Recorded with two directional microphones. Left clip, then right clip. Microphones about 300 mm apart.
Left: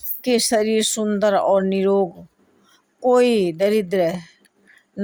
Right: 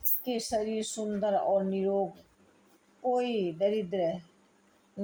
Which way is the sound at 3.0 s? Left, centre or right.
Left.